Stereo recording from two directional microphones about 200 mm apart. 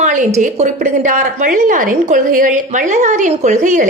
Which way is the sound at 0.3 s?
35° right (ahead or behind).